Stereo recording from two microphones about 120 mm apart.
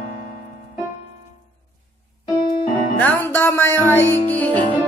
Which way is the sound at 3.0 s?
15° left (ahead or behind).